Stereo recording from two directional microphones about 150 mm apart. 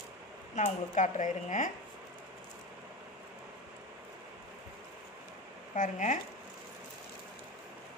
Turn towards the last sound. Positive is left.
turn(degrees=60)  # may be behind; listen again after turning